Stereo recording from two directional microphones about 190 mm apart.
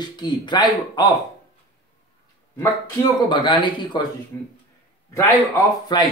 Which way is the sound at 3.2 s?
25° left (ahead or behind).